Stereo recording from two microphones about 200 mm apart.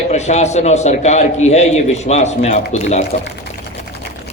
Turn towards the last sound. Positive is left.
turn(degrees=35)  # may be behind; listen again after turning